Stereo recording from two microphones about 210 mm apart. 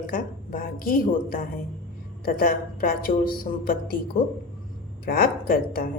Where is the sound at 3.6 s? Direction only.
40° left (ahead or behind).